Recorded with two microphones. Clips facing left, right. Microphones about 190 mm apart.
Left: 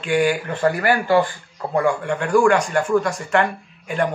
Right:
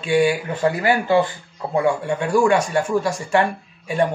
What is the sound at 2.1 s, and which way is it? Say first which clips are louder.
Speech: left 3 dB; 10° right (ahead or behind).